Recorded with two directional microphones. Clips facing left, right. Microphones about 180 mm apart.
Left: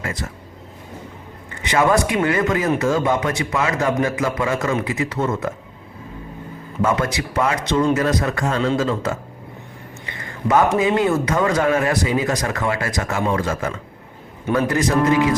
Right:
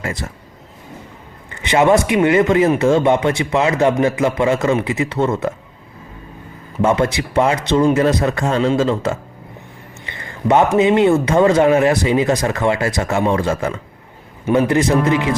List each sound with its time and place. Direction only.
0.0 s speech: 30° right (ahead or behind)
1.6 s a man's voice: 25° right (ahead or behind)
6.8 s a man's voice: 25° right (ahead or behind)